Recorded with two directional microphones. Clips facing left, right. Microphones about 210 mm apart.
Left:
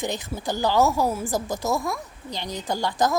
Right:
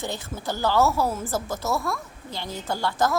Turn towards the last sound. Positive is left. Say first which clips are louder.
# left 1 dB
turn(degrees=15)  # may be behind; listen again after turning